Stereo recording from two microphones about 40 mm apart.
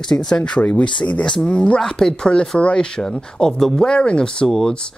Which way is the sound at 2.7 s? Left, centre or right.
Centre.